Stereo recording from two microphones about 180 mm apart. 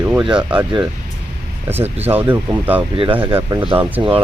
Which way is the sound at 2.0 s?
10° right (ahead or behind).